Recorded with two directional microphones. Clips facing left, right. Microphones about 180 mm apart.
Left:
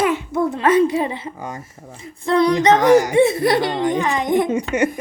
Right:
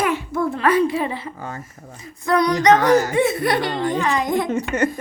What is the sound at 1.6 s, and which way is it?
Speech, 25° left (ahead or behind).